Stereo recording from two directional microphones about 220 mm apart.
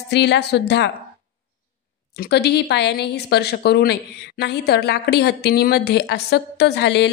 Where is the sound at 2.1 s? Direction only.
45° left (ahead or behind).